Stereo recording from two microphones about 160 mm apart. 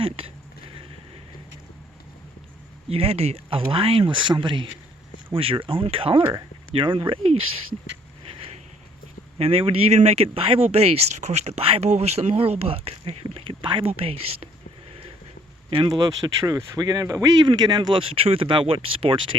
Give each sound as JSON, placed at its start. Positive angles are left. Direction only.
{"t": 2.9, "sound": "speech", "side_deg": -40}
{"t": 9.4, "sound": "speech", "side_deg": -35}
{"t": 14.8, "sound": "a sound", "side_deg": -35}
{"t": 15.7, "sound": "speech", "side_deg": -25}